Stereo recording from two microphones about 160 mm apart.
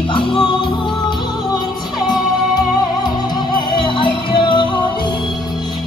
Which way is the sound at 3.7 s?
30° left (ahead or behind).